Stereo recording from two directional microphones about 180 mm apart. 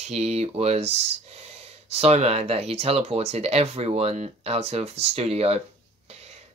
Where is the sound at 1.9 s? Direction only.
35° right (ahead or behind).